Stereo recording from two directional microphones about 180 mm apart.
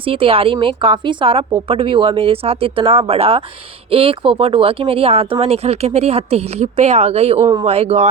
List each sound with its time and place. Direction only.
0.0 s a woman's voice: 30° right (ahead or behind)